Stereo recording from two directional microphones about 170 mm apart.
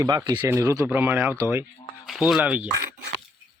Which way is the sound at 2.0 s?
Centre (ahead or behind).